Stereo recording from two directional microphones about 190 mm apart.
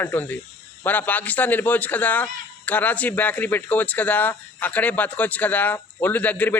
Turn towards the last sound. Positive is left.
turn(degrees=10)  # may be behind; listen again after turning